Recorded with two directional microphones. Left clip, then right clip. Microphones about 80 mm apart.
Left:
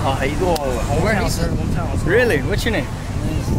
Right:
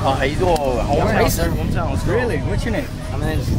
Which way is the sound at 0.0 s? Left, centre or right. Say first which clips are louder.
Right 2 dB; centre.